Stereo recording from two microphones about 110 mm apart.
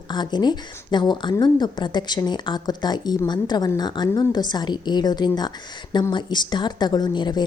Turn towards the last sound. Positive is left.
turn(degrees=40)  # may be behind; listen again after turning